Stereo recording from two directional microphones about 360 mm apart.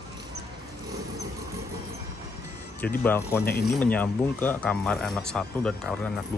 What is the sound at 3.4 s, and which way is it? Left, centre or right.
Speech, left.